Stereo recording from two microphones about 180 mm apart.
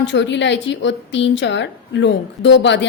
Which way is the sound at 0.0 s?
80° left.